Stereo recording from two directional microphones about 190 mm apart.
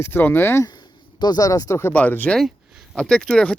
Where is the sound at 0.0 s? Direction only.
10° left (ahead or behind).